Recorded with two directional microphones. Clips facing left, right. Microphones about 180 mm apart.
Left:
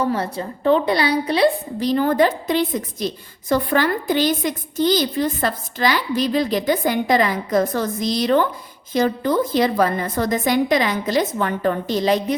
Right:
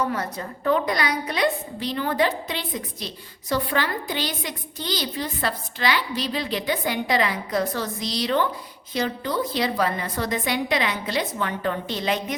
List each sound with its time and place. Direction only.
0.0 s a woman's voice: 30° left (ahead or behind)